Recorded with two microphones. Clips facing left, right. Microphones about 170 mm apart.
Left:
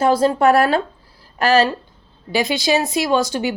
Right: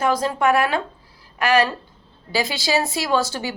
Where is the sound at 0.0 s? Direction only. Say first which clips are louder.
Left 5 dB; 30° left (ahead or behind).